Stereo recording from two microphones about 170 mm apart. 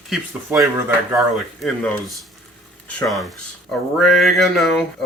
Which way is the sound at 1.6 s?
Centre (ahead or behind).